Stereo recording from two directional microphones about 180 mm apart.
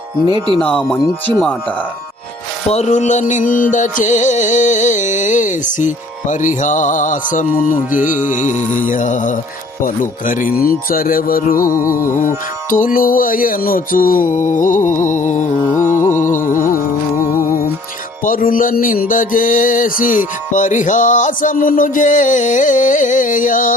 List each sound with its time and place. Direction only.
0.3 s speech: 25° right (ahead or behind)
2.6 s music: 40° left (ahead or behind)
18.3 s music: 50° left (ahead or behind)